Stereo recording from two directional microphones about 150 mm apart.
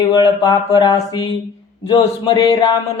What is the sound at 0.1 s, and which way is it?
Mantra, 25° left (ahead or behind).